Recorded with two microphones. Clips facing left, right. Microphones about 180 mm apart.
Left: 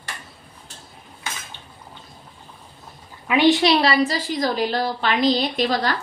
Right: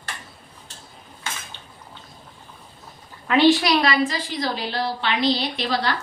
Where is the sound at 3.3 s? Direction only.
15° left (ahead or behind).